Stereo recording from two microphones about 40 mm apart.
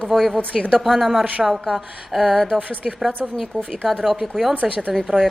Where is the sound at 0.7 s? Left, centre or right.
Centre.